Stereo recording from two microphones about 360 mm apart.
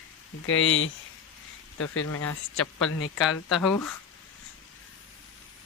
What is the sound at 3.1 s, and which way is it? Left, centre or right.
Speech, centre.